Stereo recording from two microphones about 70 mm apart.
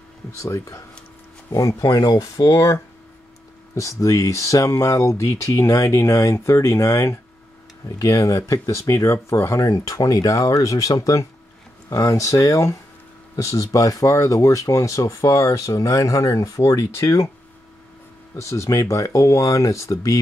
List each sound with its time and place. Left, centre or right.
0.4 s speech: left
18.3 s speech: left